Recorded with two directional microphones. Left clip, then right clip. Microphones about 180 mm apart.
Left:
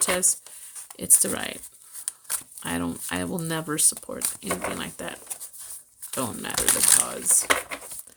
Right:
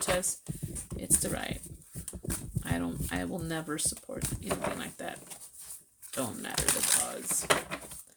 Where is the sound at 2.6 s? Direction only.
40° left (ahead or behind).